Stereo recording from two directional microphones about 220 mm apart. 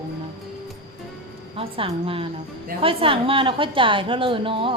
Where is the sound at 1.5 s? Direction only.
25° right (ahead or behind).